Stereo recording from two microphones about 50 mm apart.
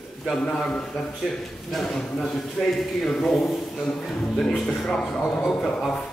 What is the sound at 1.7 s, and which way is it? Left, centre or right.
Speech, centre.